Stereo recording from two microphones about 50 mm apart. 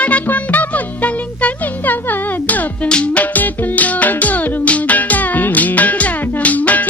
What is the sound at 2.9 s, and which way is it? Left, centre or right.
Music, left.